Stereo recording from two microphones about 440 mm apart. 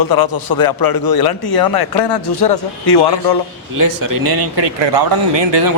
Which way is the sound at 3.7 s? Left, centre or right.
Right.